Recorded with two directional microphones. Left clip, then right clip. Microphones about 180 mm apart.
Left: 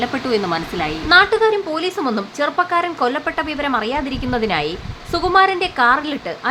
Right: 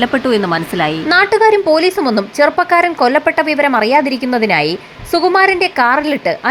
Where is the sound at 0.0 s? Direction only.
25° right (ahead or behind).